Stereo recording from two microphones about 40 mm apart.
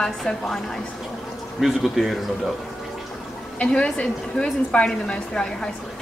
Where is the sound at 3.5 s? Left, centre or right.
Left.